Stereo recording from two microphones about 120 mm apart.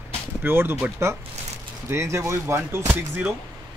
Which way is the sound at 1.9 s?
25° right (ahead or behind).